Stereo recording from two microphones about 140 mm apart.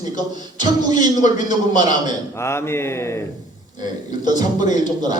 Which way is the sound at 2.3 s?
20° left (ahead or behind).